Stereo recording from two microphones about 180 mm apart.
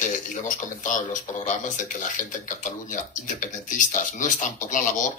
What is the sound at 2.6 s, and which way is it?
Speech, 45° left (ahead or behind).